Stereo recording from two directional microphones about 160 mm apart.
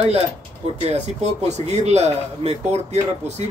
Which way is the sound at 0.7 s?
40° right (ahead or behind).